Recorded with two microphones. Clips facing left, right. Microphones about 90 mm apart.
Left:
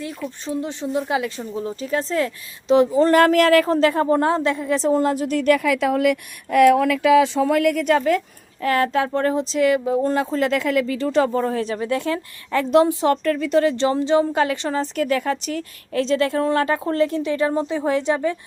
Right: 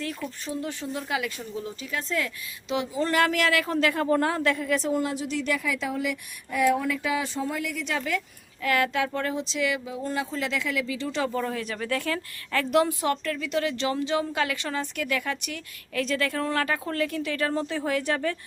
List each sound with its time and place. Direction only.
0.0 s speech: 20° left (ahead or behind)
13.1 s a woman's voice: 40° left (ahead or behind); by 18.3 s 20° left (ahead or behind)